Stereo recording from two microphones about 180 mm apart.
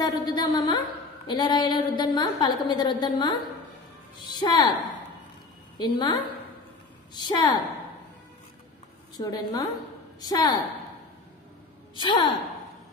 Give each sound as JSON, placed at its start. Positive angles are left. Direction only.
{"t": 0.0, "sound": "a woman's voice", "side_deg": 25}
{"t": 5.8, "sound": "a woman's voice", "side_deg": 25}
{"t": 7.2, "sound": "a woman's voice", "side_deg": 25}
{"t": 9.2, "sound": "a woman's voice", "side_deg": 20}
{"t": 11.9, "sound": "a woman's voice", "side_deg": 25}